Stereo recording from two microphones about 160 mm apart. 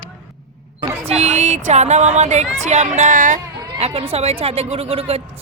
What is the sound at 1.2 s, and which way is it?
Speech, 45° right (ahead or behind).